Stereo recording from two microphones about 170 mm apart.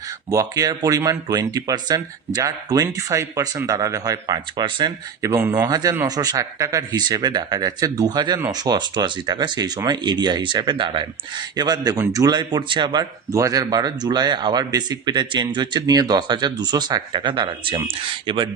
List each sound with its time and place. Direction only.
0.3 s speech: 20° right (ahead or behind)